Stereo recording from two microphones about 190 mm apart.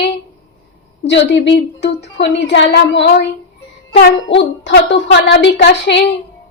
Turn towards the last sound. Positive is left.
turn(degrees=65)  # may be behind; listen again after turning